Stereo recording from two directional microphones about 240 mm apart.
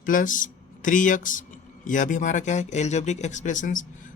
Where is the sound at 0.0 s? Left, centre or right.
Left.